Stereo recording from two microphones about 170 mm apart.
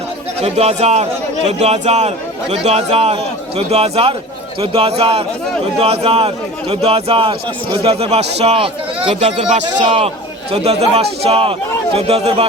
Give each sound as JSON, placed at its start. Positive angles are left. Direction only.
{"t": 0.4, "sound": "a man's voice", "side_deg": -40}
{"t": 9.8, "sound": "a man's voice", "side_deg": -30}